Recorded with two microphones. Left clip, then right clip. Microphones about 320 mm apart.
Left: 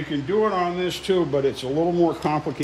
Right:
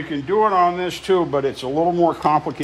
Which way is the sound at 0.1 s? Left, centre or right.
Centre.